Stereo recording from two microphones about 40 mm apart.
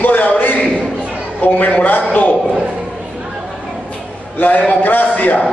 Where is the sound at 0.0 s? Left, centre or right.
Left.